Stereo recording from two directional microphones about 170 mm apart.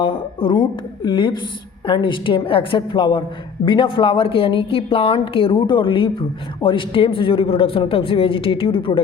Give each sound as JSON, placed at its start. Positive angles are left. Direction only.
{"t": 0.0, "sound": "a woman's voice", "side_deg": 30}